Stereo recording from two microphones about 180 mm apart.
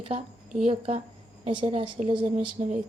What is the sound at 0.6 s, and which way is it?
A woman's voice, 35° right (ahead or behind).